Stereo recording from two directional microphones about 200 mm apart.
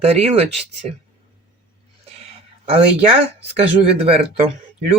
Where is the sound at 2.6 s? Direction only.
30° right (ahead or behind).